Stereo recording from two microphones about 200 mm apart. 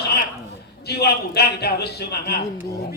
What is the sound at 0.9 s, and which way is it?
A man's voice, 55° left (ahead or behind).